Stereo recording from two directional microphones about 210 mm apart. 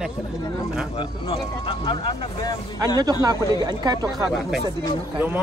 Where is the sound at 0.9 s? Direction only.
25° left (ahead or behind).